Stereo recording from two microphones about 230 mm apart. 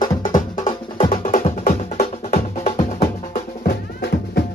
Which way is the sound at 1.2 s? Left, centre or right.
Left.